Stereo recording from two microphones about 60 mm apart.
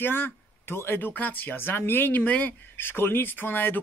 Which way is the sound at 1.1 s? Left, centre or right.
Left.